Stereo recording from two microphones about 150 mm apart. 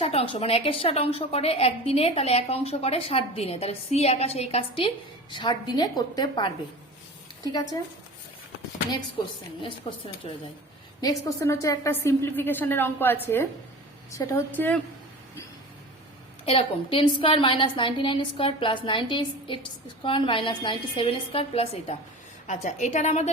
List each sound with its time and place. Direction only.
0.0 s a woman's voice: 45° left (ahead or behind); by 7.8 s 25° left (ahead or behind)
8.9 s a woman's voice: 35° left (ahead or behind)
11.0 s a woman's voice: 20° left (ahead or behind)
16.5 s a woman's voice: 35° left (ahead or behind)
22.4 s a woman's voice: 50° left (ahead or behind)